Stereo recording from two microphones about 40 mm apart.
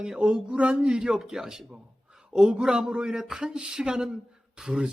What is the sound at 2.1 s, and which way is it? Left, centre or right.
A man's voice, centre.